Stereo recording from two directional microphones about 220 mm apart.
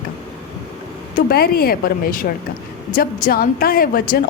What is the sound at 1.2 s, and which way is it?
A woman's voice, 45° left (ahead or behind).